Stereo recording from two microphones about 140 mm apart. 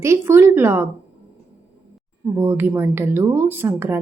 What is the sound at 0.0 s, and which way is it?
Speech, 20° right (ahead or behind).